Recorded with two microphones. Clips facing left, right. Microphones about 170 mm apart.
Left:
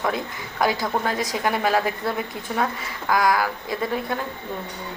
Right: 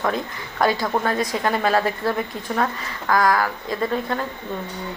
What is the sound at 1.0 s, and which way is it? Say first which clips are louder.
Speech: right 2 dB; 15° left (ahead or behind).